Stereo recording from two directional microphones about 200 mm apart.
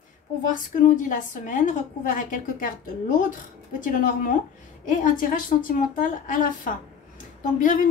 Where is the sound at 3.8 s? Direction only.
40° left (ahead or behind).